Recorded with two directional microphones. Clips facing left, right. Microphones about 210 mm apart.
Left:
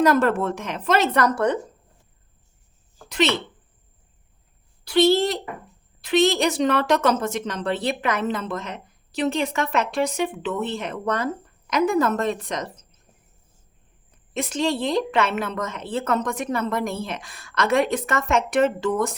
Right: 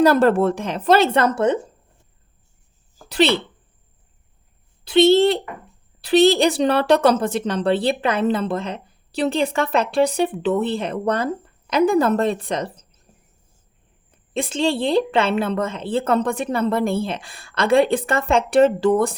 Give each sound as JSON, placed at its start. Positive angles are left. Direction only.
{"t": 0.0, "sound": "a woman's voice", "side_deg": -30}
{"t": 3.1, "sound": "a woman's voice", "side_deg": -35}
{"t": 4.9, "sound": "a woman's voice", "side_deg": -25}
{"t": 14.3, "sound": "a woman's voice", "side_deg": -30}